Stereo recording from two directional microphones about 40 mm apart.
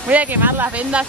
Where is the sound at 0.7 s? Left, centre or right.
Right.